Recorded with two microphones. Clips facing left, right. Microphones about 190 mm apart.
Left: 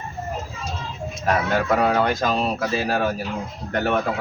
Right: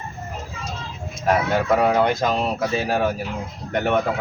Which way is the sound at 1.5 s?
20° right (ahead or behind).